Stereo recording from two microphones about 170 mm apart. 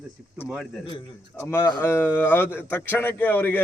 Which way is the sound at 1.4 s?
15° left (ahead or behind).